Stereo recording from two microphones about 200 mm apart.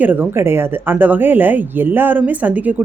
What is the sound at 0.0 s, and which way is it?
Speech, 10° right (ahead or behind).